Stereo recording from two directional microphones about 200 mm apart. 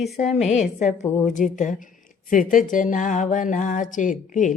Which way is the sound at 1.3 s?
40° left (ahead or behind).